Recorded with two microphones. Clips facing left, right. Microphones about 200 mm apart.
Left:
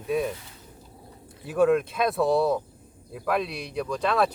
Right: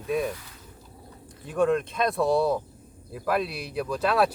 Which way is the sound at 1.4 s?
5° left (ahead or behind).